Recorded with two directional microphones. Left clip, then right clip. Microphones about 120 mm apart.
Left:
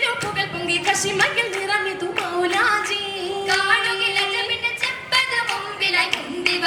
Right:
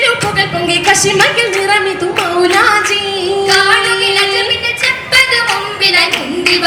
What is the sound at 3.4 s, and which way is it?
Music, 25° left (ahead or behind).